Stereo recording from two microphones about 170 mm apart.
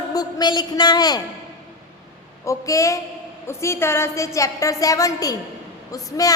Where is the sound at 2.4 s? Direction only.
20° left (ahead or behind).